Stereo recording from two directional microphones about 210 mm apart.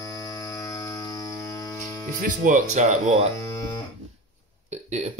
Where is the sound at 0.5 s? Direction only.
15° left (ahead or behind).